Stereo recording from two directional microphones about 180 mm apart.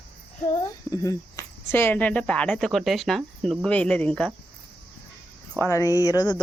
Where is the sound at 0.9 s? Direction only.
15° left (ahead or behind).